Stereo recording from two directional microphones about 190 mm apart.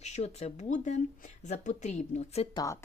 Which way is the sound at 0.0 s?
35° left (ahead or behind).